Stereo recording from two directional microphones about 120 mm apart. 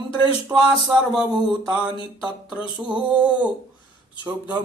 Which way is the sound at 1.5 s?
10° right (ahead or behind).